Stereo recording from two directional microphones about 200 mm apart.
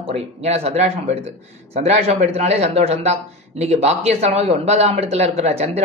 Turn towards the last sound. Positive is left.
turn(degrees=-30)  # may be behind; listen again after turning